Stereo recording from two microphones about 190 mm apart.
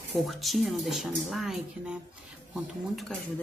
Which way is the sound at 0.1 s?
Centre (ahead or behind).